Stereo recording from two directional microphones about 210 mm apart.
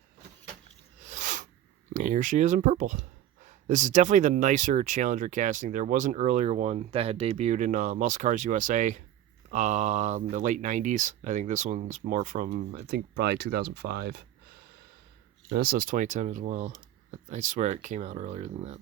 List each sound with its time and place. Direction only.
0.9 s a sound: 35° right (ahead or behind)
1.9 s speech: 35° right (ahead or behind)
15.4 s speech: 50° right (ahead or behind); by 18.8 s 35° right (ahead or behind)